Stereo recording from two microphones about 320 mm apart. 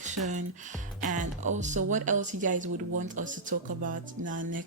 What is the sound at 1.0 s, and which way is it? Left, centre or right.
Speech, right.